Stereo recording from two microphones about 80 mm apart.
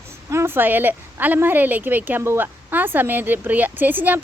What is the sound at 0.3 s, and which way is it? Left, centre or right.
A woman's voice, right.